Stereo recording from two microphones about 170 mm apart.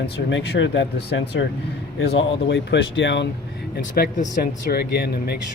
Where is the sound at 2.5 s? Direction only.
90° left.